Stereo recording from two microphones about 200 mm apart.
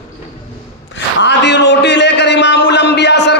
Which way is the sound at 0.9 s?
60° left (ahead or behind).